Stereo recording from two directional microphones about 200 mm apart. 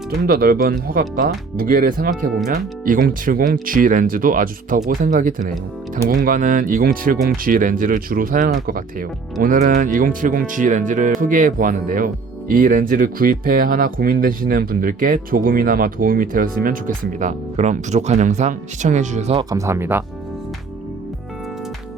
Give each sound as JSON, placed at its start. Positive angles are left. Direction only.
{"t": 0.3, "sound": "speech", "side_deg": -45}
{"t": 19.4, "sound": "speech", "side_deg": -15}